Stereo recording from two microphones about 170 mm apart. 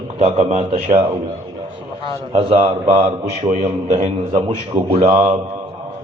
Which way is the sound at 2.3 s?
30° right (ahead or behind).